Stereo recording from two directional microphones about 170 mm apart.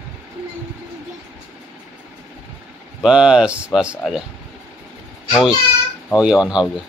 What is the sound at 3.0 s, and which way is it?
Speech, 5° right (ahead or behind).